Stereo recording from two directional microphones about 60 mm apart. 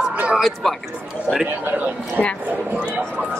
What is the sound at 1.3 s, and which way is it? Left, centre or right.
Speech, left.